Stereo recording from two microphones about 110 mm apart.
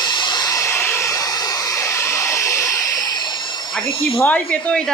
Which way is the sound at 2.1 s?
25° left (ahead or behind).